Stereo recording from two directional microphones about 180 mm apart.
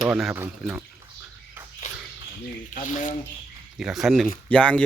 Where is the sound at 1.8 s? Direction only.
45° left (ahead or behind).